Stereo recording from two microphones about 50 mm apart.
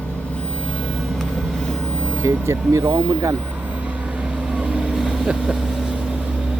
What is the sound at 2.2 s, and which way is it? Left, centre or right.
Speech, right.